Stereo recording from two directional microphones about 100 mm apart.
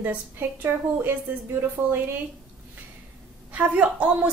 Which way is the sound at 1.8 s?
25° right (ahead or behind).